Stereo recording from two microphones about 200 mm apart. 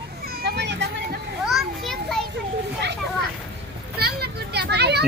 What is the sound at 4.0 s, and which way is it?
Children playing, 50° right (ahead or behind).